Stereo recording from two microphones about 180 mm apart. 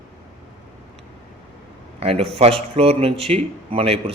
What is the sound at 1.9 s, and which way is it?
A man's voice, 35° right (ahead or behind).